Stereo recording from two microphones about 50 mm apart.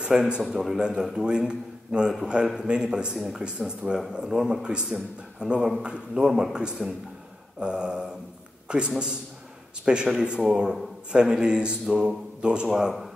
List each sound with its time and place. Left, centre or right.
0.0 s a man's voice: centre
2.4 s a man's voice: centre
2.7 s speech: centre
3.2 s speech: centre
3.4 s a man's voice: centre